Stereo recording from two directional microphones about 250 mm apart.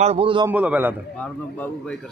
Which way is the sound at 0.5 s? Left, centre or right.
Centre.